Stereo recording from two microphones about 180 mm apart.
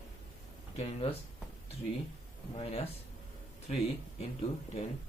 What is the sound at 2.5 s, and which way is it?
Speech, 35° left (ahead or behind).